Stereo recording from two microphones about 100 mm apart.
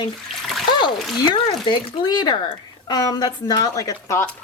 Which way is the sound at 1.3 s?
50° left (ahead or behind).